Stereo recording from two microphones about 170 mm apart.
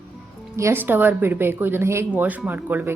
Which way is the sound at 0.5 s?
15° right (ahead or behind).